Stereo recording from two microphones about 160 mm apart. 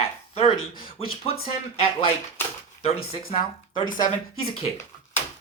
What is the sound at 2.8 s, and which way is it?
Speech, 40° left (ahead or behind).